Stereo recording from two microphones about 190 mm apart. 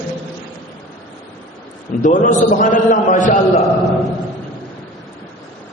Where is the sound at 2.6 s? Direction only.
45° left (ahead or behind).